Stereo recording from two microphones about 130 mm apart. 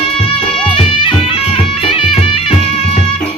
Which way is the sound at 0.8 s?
45° left (ahead or behind).